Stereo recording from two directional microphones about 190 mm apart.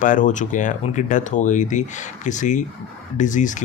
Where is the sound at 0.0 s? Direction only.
45° left (ahead or behind).